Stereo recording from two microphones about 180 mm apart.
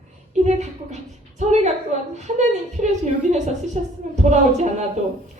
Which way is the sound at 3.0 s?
40° right (ahead or behind).